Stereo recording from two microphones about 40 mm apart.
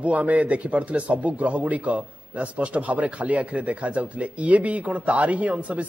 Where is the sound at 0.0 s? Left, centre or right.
Right.